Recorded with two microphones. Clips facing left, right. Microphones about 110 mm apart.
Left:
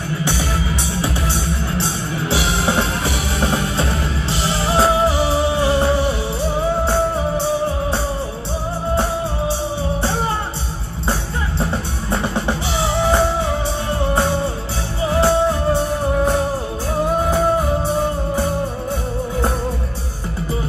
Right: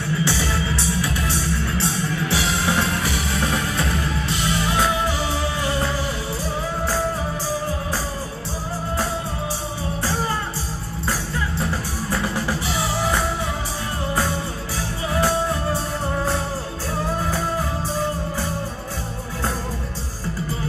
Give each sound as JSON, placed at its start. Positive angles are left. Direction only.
{"t": 0.2, "sound": "music", "side_deg": 25}
{"t": 10.0, "sound": "music", "side_deg": 25}
{"t": 17.2, "sound": "music", "side_deg": 25}